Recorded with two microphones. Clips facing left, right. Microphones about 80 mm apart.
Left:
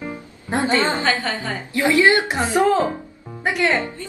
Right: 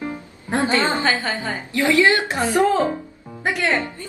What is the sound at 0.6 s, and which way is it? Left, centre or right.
Speech, right.